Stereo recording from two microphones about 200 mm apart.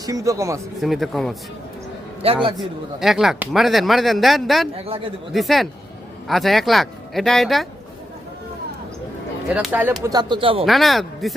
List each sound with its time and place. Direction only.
0.0 s a man's voice: 15° right (ahead or behind)
0.8 s speech: centre (ahead or behind)
2.2 s speech: 25° right (ahead or behind)
2.6 s speech: centre (ahead or behind)
9.5 s speech: 5° right (ahead or behind); by 10.7 s 25° right (ahead or behind)
10.7 s speech: centre (ahead or behind)